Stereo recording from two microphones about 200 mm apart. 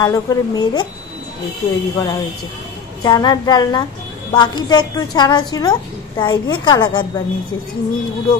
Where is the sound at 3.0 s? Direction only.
20° left (ahead or behind).